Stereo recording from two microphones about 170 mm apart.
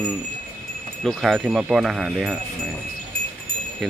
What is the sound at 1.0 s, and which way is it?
Speech, centre (ahead or behind).